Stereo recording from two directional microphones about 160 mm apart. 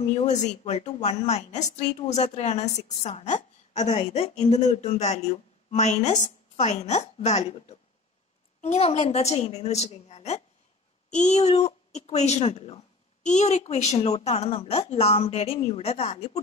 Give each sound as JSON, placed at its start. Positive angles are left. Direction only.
{"t": 0.1, "sound": "a woman's voice", "side_deg": 45}